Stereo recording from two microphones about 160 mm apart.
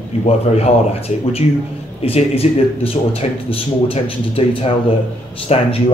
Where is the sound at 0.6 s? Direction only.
40° left (ahead or behind).